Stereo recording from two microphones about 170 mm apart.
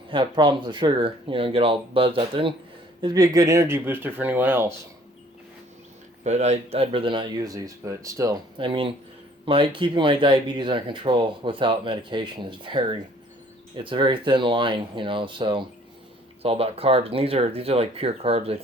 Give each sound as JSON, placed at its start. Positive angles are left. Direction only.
{"t": 0.1, "sound": "speech", "side_deg": -30}
{"t": 6.2, "sound": "speech", "side_deg": -40}